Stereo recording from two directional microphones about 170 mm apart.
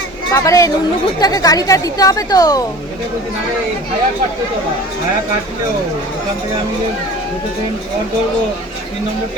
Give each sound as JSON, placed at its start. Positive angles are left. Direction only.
{"t": 0.3, "sound": "speech", "side_deg": 20}